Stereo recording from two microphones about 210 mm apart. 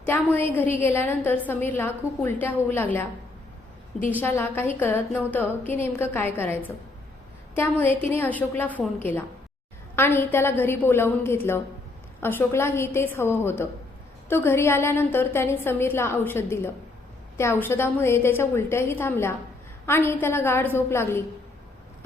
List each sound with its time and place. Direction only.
0.0 s a woman's voice: 10° left (ahead or behind)
4.2 s a woman's voice: 10° left (ahead or behind)
7.6 s a woman's voice: 10° left (ahead or behind)